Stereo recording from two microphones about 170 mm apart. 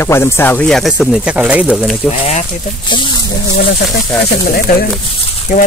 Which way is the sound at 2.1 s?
40° left (ahead or behind).